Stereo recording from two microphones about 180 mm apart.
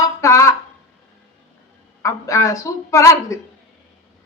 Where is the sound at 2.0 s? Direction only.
15° left (ahead or behind).